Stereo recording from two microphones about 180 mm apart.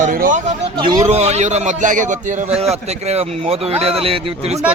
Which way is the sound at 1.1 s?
35° right (ahead or behind).